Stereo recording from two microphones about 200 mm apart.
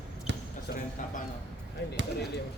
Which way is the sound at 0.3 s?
60° right (ahead or behind).